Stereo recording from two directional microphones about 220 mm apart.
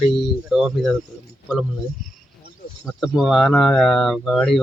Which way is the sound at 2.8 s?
Centre (ahead or behind).